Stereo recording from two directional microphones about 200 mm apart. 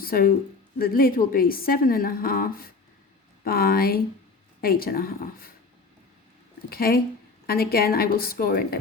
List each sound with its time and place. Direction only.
0.0 s a woman's voice: 45° left (ahead or behind)
6.7 s a woman's voice: 50° left (ahead or behind)